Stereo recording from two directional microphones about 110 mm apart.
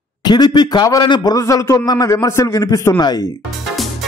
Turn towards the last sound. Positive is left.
turn(degrees=30)  # may be behind; listen again after turning